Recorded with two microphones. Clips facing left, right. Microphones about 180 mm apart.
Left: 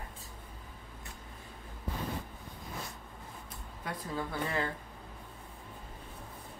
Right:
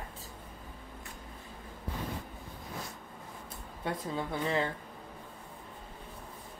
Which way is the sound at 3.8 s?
25° right (ahead or behind).